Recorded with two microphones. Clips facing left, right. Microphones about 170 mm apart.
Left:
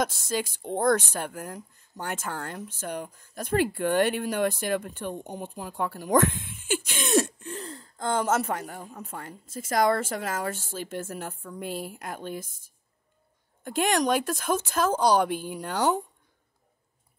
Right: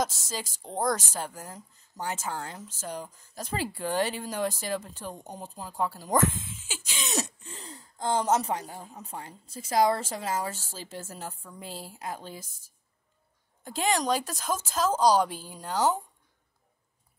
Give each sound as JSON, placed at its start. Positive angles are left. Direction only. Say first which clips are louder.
{"t": 0.0, "sound": "a woman's voice", "louder": "left 4 dB", "side_deg": 55}
{"t": 13.7, "sound": "a woman's voice", "louder": "left 3 dB", "side_deg": 60}